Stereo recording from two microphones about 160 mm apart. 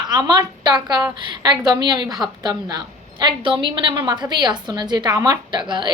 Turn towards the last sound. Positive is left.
turn(degrees=-30)  # may be behind; listen again after turning